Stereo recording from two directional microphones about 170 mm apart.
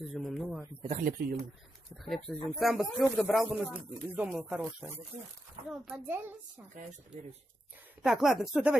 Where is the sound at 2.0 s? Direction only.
Centre (ahead or behind).